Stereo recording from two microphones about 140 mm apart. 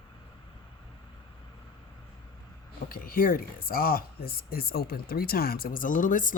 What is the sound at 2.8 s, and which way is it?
Speech, 90° left.